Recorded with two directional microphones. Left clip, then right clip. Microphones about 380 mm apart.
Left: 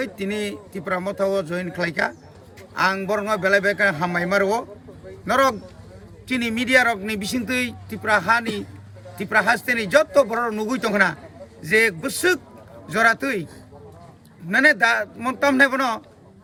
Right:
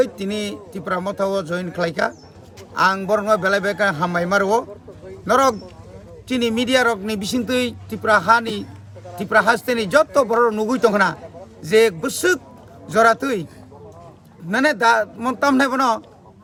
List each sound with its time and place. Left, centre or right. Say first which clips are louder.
0.0 s a man's voice: right 5 dB; centre
14.5 s speech: right 1 dB; centre